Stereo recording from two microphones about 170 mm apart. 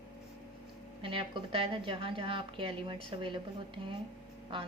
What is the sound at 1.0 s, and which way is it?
A woman's voice, 30° right (ahead or behind).